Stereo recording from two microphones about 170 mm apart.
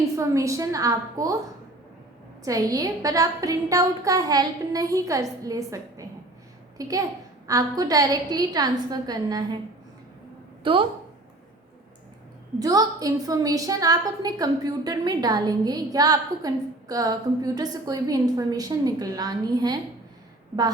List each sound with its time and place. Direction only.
0.0 s a woman's voice: 20° right (ahead or behind)
2.4 s a woman's voice: 20° right (ahead or behind)
10.6 s a woman's voice: 30° right (ahead or behind)
12.5 s a woman's voice: 20° right (ahead or behind)